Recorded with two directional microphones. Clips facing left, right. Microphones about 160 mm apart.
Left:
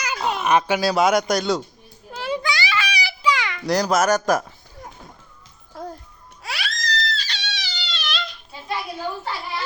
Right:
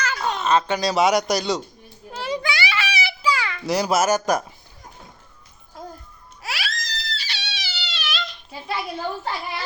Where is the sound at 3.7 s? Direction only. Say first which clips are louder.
Left 1 dB; 5° right (ahead or behind).